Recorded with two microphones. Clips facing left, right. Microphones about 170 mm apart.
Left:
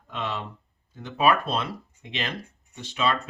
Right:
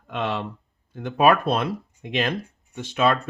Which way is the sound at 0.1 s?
55° right (ahead or behind).